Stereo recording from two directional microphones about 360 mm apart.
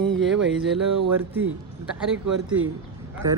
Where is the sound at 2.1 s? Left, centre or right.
Right.